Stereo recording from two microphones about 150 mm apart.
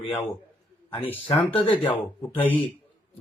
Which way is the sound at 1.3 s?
35° left (ahead or behind).